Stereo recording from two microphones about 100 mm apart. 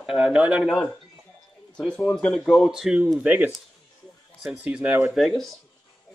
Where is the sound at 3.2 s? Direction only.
20° right (ahead or behind).